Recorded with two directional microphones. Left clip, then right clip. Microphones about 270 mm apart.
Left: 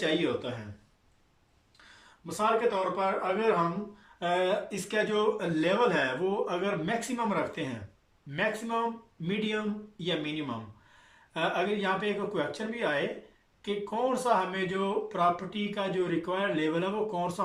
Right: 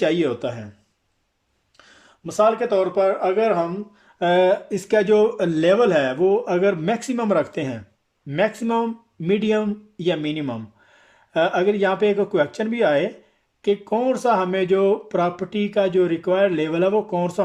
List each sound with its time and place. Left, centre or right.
2.2 s speech: right